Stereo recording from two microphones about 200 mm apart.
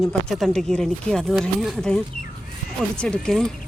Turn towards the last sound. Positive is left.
turn(degrees=5)  # may be behind; listen again after turning